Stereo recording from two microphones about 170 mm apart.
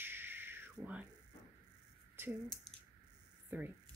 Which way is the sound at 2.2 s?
15° right (ahead or behind).